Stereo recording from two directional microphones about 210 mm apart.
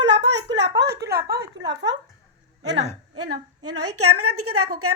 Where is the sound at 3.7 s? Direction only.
90° right.